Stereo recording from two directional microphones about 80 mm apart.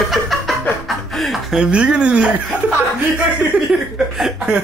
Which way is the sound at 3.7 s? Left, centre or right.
Centre.